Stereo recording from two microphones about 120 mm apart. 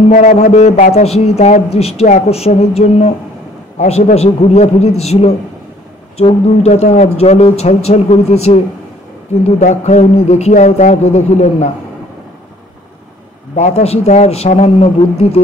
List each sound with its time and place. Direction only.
0.1 s a man's voice: 80° left; by 8.5 s 65° left (ahead or behind)
9.6 s a man's voice: 75° left (ahead or behind)
13.6 s a man's voice: 65° left (ahead or behind)